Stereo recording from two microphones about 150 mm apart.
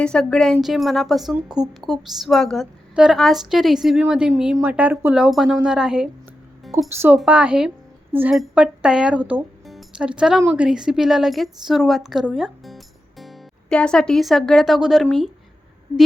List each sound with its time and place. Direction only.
0.0 s a woman's voice: 5° left (ahead or behind)
6.9 s a woman's voice: 15° right (ahead or behind)